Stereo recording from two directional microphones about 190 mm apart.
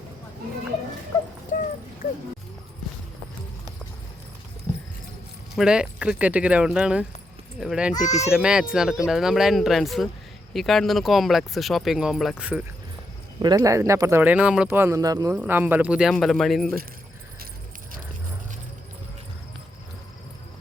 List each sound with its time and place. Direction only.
1.5 s a sound: 45° left (ahead or behind)
5.5 s speech: 5° right (ahead or behind)
8.0 s speech: 35° left (ahead or behind)
8.3 s speech: 5° right (ahead or behind)
13.4 s speech: 20° right (ahead or behind); by 16.7 s centre (ahead or behind)